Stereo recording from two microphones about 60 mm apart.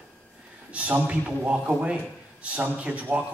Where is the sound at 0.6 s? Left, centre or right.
Right.